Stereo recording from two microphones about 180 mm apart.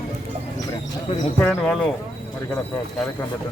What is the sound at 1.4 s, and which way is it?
Speech, 5° left (ahead or behind).